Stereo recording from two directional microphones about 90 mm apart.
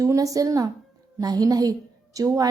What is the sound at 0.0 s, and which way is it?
A woman's voice, 40° right (ahead or behind).